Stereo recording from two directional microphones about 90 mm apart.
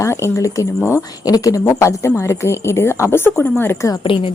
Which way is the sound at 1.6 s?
30° left (ahead or behind).